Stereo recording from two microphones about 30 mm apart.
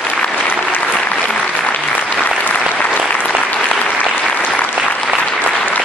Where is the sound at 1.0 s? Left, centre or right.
Left.